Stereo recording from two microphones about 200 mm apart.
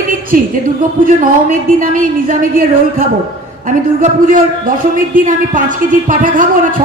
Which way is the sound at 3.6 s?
40° right (ahead or behind).